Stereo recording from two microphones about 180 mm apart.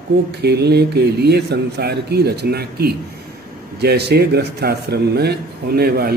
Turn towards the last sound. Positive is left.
turn(degrees=-60)  # may be behind; listen again after turning